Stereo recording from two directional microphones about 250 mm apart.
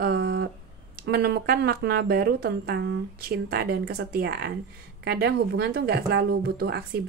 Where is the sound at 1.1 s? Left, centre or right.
Right.